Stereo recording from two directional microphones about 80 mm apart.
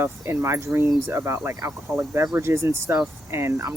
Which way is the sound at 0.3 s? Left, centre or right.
Right.